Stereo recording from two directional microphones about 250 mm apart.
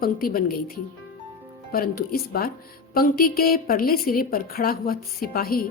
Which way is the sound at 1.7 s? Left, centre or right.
Left.